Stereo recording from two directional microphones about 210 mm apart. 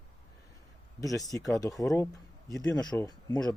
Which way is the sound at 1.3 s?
Centre (ahead or behind).